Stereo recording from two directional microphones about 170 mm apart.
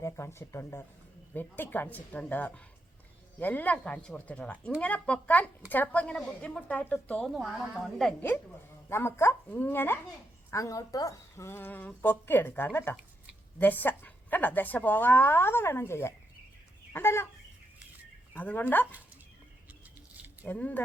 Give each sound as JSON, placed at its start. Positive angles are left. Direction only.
{"t": 0.0, "sound": "a woman's voice", "side_deg": 15}
{"t": 18.3, "sound": "a woman's voice", "side_deg": 10}
{"t": 20.4, "sound": "a woman's voice", "side_deg": 10}